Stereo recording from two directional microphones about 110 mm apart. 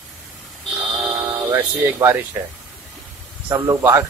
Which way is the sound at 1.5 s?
25° right (ahead or behind).